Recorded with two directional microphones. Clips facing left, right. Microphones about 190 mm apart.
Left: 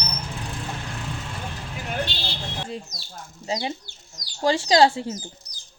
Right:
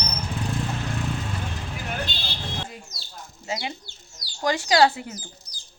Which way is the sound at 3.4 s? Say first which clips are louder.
Left 3 dB; 35° left (ahead or behind).